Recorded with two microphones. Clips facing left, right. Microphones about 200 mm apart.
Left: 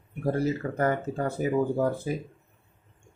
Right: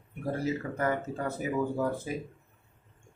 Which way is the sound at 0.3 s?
35° left (ahead or behind).